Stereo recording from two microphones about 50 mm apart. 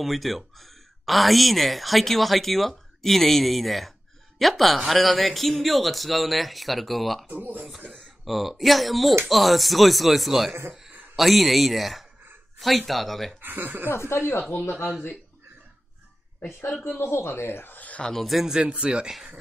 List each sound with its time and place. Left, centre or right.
0.0 s speech: centre
7.2 s speech: right
7.9 s speech: centre
13.4 s speech: right
13.8 s speech: left
16.8 s speech: left
17.7 s a sound: left
18.0 s speech: centre
18.5 s speech: centre